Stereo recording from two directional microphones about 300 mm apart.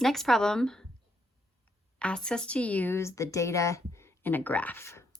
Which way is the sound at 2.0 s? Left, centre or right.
Centre.